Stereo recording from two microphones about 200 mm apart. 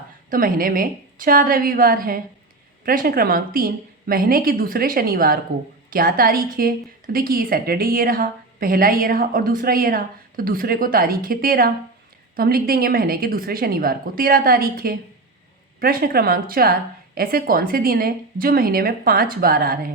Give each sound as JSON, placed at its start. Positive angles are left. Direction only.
{"t": 0.3, "sound": "a woman's voice", "side_deg": -45}